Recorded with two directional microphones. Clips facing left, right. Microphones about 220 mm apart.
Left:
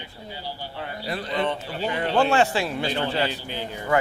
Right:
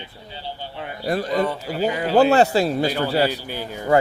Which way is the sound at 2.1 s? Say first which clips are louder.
Right 6 dB; 40° right (ahead or behind).